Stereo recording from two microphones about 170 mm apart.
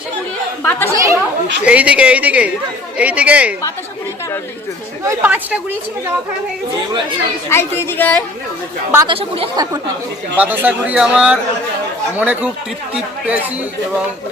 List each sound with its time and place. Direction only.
0.6 s chatter: 10° left (ahead or behind)
0.9 s speech: 20° right (ahead or behind)
1.6 s speech: 5° right (ahead or behind)
5.0 s speech: 10° right (ahead or behind)
7.5 s a woman's voice: 15° left (ahead or behind)
9.0 s speech: 30° right (ahead or behind)
10.3 s speech: 10° right (ahead or behind)